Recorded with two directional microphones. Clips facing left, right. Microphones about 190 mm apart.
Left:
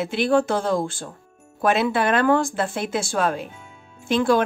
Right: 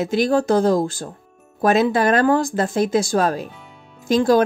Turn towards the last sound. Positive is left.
turn(degrees=-40)  # may be behind; listen again after turning